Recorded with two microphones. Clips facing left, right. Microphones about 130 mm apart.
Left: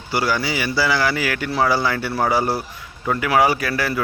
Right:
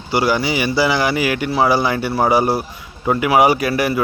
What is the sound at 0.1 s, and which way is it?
Speech, 20° right (ahead or behind).